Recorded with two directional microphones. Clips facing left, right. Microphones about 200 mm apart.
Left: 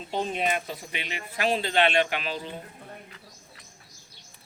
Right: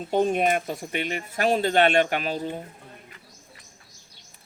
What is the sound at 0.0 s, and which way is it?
Speech, 50° right (ahead or behind).